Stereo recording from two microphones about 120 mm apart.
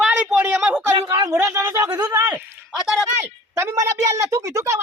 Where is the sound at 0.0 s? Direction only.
10° right (ahead or behind).